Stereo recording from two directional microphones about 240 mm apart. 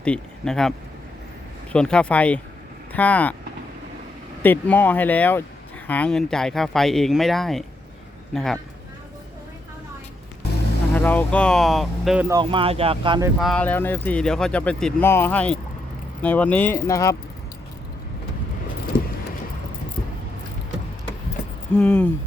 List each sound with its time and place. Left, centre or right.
0.0 s speech: centre
1.7 s speech: centre
4.4 s a man's voice: centre
10.9 s speech: centre
12.4 s speech: right
13.4 s speech: centre
21.7 s speech: centre